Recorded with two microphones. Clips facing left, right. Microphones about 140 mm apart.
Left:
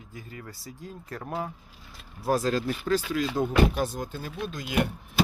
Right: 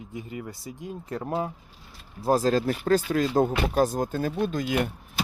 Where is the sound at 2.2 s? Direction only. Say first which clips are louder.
Right 3 dB; 35° right (ahead or behind).